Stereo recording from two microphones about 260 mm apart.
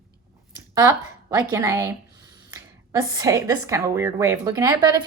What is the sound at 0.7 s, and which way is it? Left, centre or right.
A woman's voice, centre.